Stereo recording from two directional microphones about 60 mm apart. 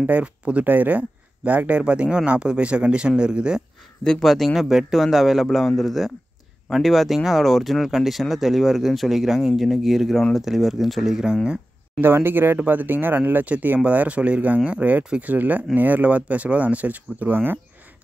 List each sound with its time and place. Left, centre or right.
0.0 s speech: right
4.0 s speech: centre
12.0 s speech: right